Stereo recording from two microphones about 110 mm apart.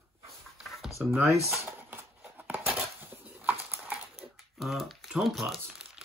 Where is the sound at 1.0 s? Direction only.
5° right (ahead or behind).